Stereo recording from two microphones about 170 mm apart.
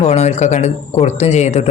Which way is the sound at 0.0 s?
40° left (ahead or behind).